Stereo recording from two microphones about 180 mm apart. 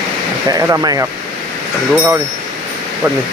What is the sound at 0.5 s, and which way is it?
Speech, 20° right (ahead or behind).